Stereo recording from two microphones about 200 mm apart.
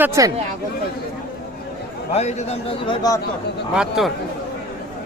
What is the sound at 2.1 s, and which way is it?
A man's voice, 35° left (ahead or behind).